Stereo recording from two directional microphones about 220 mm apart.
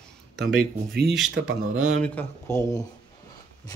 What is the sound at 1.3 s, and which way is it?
Speech, 60° right (ahead or behind).